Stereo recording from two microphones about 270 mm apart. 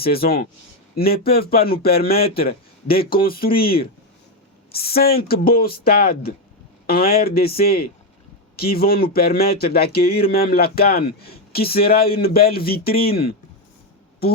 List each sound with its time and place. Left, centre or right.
0.0 s a man's voice: left